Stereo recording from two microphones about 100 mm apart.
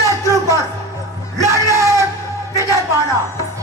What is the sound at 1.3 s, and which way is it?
Speech, 35° right (ahead or behind).